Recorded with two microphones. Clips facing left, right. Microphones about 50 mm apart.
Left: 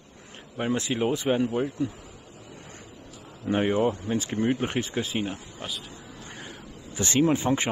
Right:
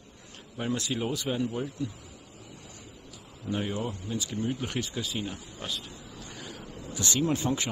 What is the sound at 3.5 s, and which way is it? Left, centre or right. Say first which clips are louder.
Speech: left 8 dB; left.